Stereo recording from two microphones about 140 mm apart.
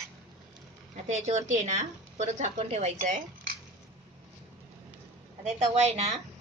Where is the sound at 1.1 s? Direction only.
60° right (ahead or behind).